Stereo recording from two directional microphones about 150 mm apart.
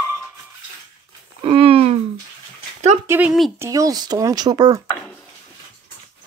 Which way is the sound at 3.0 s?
15° right (ahead or behind).